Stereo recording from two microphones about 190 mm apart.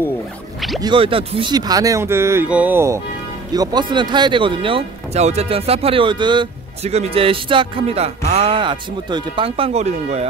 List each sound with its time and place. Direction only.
0.7 s speech: 25° right (ahead or behind)